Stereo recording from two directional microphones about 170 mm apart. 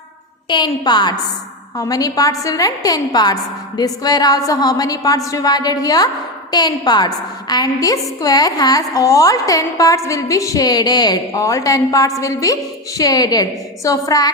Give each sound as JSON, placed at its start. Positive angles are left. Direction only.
{"t": 0.4, "sound": "a woman's voice", "side_deg": 25}